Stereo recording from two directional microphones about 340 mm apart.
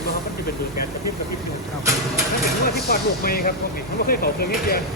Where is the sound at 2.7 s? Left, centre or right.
Left.